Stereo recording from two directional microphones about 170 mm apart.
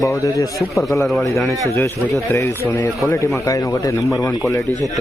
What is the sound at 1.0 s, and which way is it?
Speech, centre (ahead or behind).